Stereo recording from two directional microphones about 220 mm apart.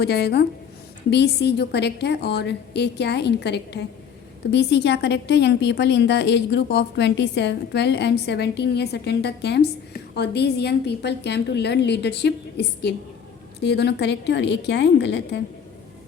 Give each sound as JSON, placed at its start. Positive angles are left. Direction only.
{"t": 0.0, "sound": "a woman's voice", "side_deg": 50}